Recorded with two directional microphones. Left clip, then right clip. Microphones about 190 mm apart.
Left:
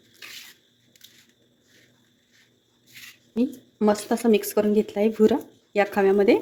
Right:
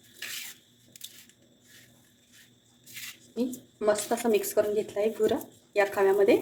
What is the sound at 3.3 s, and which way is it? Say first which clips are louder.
Speech: left 6 dB; 45° left (ahead or behind).